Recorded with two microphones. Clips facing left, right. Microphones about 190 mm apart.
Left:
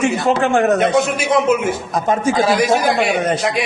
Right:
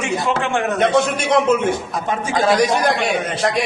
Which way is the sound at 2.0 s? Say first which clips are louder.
Left 6 dB; 40° left (ahead or behind).